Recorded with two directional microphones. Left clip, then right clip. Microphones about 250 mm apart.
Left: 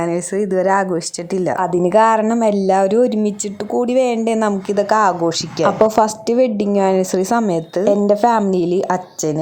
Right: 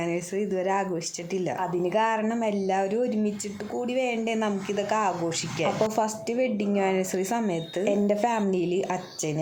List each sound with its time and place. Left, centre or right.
0.5 s a woman's voice: centre